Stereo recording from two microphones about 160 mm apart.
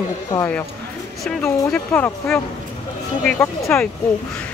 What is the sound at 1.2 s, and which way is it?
Speech, 5° left (ahead or behind).